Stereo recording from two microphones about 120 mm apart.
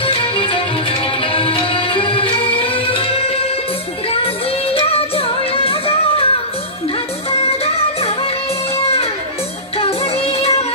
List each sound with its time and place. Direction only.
0.0 s music: 45° left (ahead or behind)
7.2 s music: 55° left (ahead or behind)
9.8 s music: 55° left (ahead or behind)